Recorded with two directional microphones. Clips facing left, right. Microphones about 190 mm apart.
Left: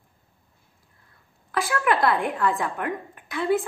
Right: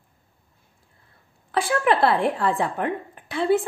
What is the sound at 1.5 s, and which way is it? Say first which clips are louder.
Speech: right 3 dB; 30° right (ahead or behind).